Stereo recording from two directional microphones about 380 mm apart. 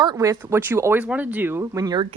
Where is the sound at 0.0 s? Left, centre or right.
Centre.